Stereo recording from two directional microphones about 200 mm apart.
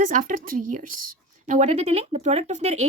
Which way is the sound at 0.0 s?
40° right (ahead or behind).